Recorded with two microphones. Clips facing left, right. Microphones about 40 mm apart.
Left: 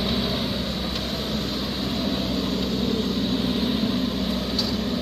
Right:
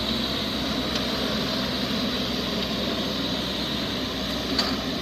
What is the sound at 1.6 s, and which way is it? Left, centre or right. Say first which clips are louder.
Vehicle: right 1 dB; right.